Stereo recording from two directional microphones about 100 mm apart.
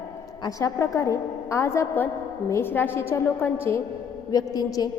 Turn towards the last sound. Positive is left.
turn(degrees=40)  # may be behind; listen again after turning